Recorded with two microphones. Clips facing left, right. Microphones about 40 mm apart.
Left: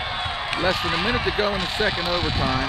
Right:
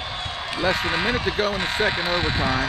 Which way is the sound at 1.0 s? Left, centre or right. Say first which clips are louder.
Even; centre.